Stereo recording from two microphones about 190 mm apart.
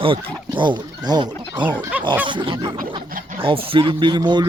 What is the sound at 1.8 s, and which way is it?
Speech, 10° right (ahead or behind).